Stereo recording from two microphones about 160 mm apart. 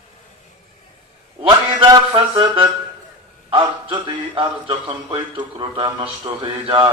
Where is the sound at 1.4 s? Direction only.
30° right (ahead or behind).